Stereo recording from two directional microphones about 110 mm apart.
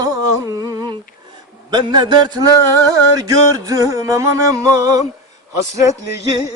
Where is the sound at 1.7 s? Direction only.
40° right (ahead or behind).